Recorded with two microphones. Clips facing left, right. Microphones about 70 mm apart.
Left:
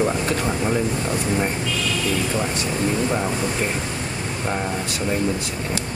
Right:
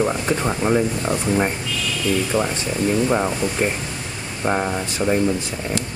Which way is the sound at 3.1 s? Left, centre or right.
Centre.